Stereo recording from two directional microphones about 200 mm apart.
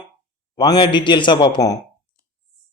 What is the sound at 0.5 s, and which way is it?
Speech, 20° left (ahead or behind).